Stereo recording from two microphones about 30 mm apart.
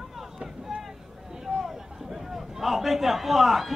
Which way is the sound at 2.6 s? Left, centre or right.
Centre.